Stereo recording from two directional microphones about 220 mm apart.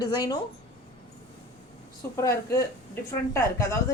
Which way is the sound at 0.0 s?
15° left (ahead or behind).